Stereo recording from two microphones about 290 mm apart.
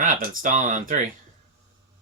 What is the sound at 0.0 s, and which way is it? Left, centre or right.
Speech, right.